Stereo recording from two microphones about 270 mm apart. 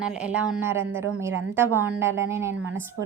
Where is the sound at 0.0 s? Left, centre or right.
Centre.